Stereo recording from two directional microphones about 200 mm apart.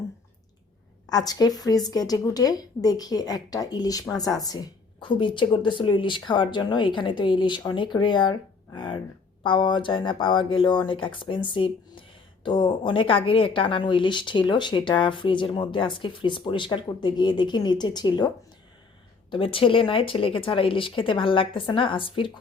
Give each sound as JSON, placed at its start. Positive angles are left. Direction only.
{"t": 1.1, "sound": "speech", "side_deg": 20}
{"t": 19.3, "sound": "speech", "side_deg": 25}